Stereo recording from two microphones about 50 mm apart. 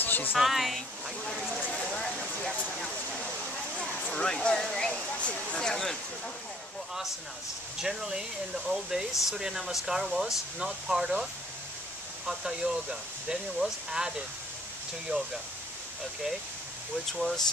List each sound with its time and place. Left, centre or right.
0.0 s a sound: left
0.4 s speech: centre
1.6 s a sound: left
2.0 s a sound: centre
3.8 s speech: centre
5.6 s speech: centre
7.8 s speech: centre
12.3 s speech: centre
15.1 s speech: right
17.1 s speech: centre